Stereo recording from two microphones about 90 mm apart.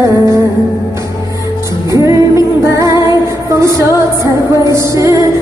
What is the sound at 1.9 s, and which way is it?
Music, 35° right (ahead or behind).